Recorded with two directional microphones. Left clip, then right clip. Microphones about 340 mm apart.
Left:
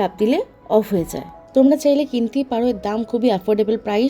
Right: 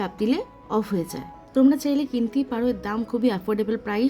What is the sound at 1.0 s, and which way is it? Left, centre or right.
Speech, centre.